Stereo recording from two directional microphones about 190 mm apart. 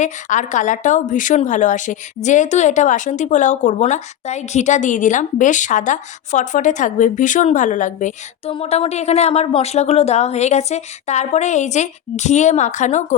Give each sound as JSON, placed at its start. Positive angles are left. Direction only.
{"t": 0.0, "sound": "a woman's voice", "side_deg": 40}